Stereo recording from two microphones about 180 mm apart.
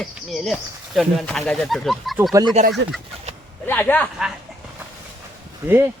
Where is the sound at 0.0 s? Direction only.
Centre (ahead or behind).